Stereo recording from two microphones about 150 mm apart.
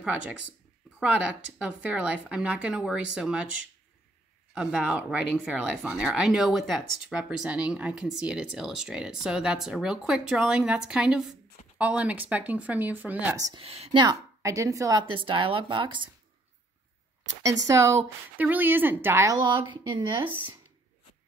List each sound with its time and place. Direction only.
0.0 s speech: 10° right (ahead or behind)
13.6 s a woman's voice: 40° right (ahead or behind)
14.0 s a woman's voice: 20° right (ahead or behind)
17.4 s speech: 20° right (ahead or behind)
19.3 s a woman's voice: 30° right (ahead or behind)